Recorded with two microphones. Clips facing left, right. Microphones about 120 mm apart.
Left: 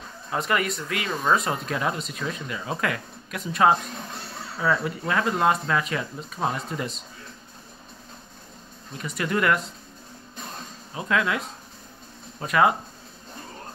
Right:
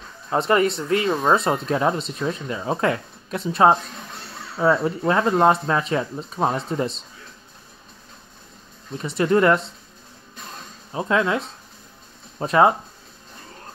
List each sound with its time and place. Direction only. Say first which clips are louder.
0.3 s speech: right 7 dB; 30° right (ahead or behind)
8.9 s speech: right 8 dB; 30° right (ahead or behind)
10.9 s speech: right 4 dB; 30° right (ahead or behind)